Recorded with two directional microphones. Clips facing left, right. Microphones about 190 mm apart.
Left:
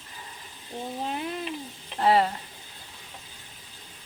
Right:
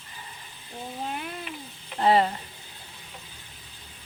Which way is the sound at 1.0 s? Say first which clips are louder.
Left 2 dB; 25° left (ahead or behind).